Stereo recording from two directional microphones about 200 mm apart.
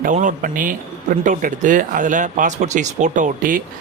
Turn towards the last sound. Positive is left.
turn(degrees=-45)  # may be behind; listen again after turning